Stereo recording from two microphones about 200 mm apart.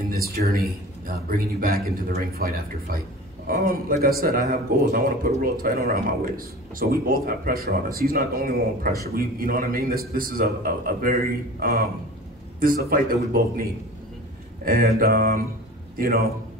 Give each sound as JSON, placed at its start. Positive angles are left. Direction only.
{"t": 0.1, "sound": "a man's voice", "side_deg": -50}